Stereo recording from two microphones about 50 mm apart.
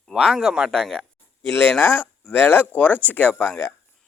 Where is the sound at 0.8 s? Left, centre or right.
Centre.